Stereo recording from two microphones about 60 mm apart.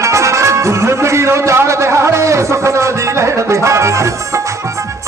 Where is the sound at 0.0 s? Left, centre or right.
Right.